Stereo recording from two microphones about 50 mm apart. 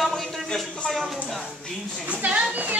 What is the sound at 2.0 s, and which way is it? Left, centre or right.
Speech, right.